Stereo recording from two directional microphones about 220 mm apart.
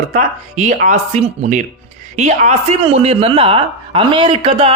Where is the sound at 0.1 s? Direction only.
35° right (ahead or behind).